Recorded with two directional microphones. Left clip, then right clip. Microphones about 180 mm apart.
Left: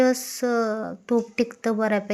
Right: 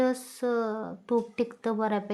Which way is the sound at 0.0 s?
15° left (ahead or behind).